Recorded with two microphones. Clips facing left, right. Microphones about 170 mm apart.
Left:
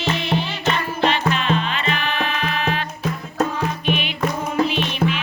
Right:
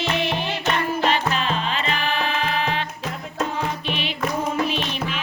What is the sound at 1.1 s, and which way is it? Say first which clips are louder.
Music: left 2 dB; 35° right (ahead or behind).